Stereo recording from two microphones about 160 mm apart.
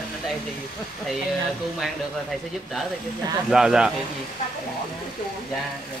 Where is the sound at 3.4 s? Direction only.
5° right (ahead or behind).